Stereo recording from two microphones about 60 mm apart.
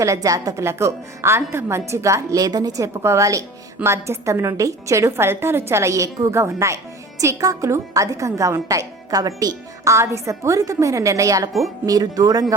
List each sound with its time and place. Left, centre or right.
0.0 s a woman's voice: right
0.5 s a woman's voice: right
3.0 s a woman's voice: right
9.9 s a woman's voice: right
11.9 s speech: right